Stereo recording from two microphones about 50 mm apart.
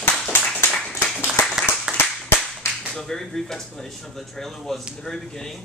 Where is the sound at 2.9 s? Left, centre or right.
Centre.